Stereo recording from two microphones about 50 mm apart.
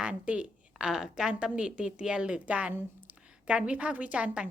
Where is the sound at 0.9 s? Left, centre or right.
Centre.